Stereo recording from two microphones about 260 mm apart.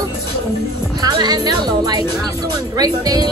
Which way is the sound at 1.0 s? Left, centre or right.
Centre.